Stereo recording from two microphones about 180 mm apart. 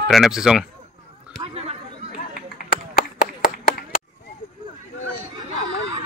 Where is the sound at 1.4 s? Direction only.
35° right (ahead or behind).